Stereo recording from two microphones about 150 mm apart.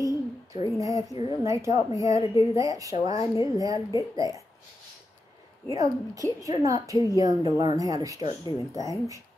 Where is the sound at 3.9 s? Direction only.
25° right (ahead or behind).